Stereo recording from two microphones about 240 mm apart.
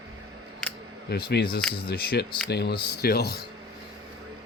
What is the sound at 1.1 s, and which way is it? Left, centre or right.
Speech, left.